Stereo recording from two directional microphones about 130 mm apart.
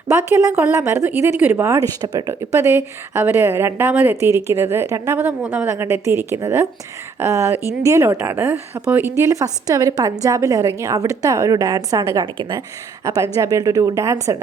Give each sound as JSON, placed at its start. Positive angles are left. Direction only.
{"t": 0.1, "sound": "a woman's voice", "side_deg": -15}
{"t": 13.1, "sound": "a woman's voice", "side_deg": -25}